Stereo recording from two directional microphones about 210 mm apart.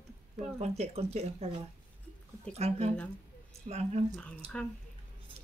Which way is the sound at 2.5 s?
30° right (ahead or behind).